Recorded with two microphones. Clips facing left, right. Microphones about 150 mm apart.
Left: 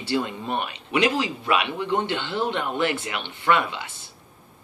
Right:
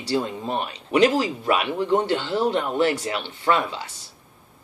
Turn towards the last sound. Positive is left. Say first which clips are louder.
# even
turn(degrees=-35)  # may be behind; listen again after turning